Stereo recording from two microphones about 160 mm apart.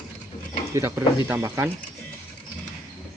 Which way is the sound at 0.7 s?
20° right (ahead or behind).